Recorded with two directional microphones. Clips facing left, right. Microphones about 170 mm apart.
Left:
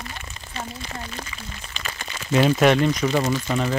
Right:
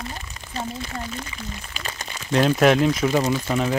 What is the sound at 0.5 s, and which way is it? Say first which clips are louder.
Speech: right 4 dB; 40° right (ahead or behind).